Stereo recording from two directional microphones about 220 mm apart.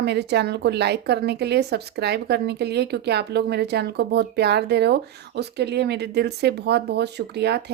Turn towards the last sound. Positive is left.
turn(degrees=-50)  # may be behind; listen again after turning